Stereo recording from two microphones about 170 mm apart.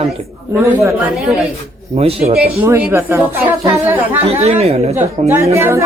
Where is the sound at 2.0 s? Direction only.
35° right (ahead or behind).